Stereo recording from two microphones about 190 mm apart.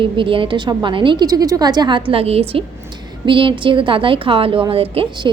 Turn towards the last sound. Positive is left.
turn(degrees=-30)  # may be behind; listen again after turning